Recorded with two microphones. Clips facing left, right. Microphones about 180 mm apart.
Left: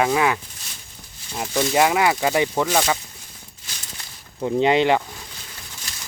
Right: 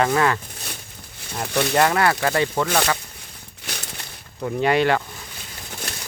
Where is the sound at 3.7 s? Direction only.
65° right (ahead or behind).